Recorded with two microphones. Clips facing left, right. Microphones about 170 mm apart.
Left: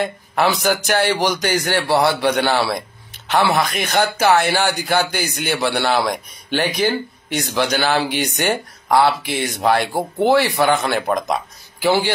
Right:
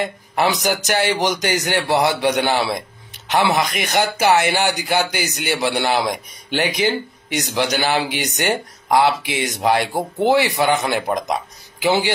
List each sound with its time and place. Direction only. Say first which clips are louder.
0.4 s speech: left 1 dB; 15° right (ahead or behind)